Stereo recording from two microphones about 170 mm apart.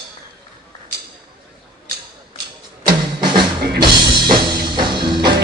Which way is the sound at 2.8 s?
25° right (ahead or behind).